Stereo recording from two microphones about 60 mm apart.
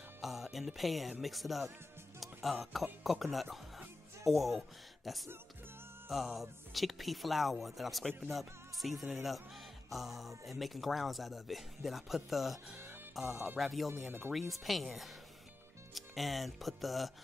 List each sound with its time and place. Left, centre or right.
0.2 s music: centre
1.2 s speech: centre
6.0 s music: centre
6.7 s speech: centre
8.3 s music: centre
9.1 s speech: centre